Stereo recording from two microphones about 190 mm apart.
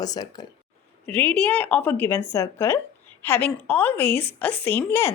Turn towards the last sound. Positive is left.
turn(degrees=10)  # may be behind; listen again after turning